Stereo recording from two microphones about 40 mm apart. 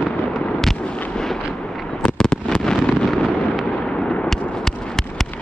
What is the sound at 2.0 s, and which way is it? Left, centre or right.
Fireworks, centre.